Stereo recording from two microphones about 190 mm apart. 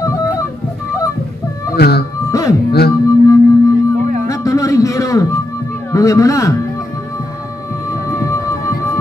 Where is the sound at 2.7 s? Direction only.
55° left (ahead or behind).